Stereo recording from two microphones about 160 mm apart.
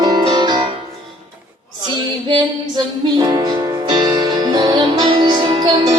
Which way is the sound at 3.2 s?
25° right (ahead or behind).